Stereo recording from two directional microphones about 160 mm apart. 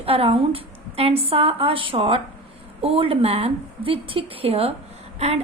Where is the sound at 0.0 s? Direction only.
35° right (ahead or behind).